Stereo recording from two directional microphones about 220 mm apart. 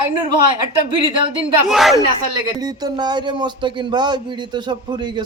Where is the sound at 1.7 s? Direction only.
Centre (ahead or behind).